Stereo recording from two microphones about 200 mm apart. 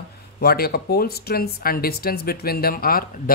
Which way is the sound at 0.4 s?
50° left (ahead or behind).